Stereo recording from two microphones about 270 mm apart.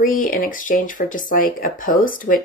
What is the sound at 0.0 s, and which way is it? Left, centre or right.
Speech, left.